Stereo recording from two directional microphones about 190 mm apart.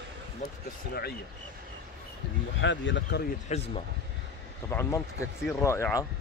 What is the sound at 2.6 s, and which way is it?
Speech, 70° left (ahead or behind).